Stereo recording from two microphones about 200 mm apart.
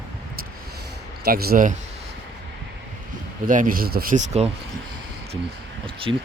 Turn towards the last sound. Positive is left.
turn(degrees=-25)  # may be behind; listen again after turning